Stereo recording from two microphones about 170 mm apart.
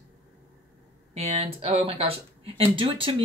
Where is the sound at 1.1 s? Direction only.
35° right (ahead or behind).